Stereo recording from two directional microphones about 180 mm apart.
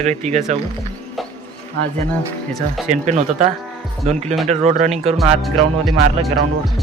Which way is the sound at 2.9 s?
40° right (ahead or behind).